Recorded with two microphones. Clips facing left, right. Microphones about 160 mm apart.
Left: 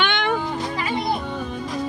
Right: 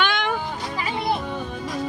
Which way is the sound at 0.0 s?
Centre (ahead or behind).